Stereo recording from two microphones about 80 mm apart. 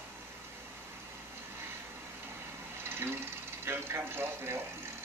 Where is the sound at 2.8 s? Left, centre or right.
Right.